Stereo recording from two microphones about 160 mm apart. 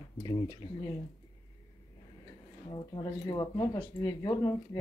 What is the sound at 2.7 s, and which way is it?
Speech, 30° left (ahead or behind).